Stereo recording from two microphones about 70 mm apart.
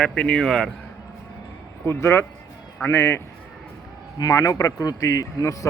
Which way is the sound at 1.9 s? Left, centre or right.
Left.